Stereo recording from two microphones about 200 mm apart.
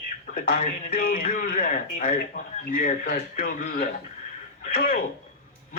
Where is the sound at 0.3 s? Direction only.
45° left (ahead or behind).